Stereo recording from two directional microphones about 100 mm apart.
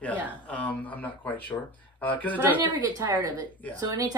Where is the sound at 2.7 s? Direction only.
40° right (ahead or behind).